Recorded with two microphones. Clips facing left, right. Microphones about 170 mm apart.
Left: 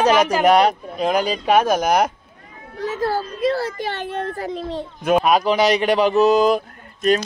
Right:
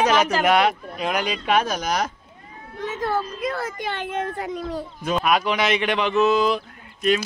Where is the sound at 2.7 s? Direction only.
35° left (ahead or behind).